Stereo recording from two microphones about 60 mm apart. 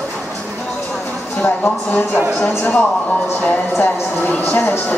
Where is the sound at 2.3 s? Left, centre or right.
Left.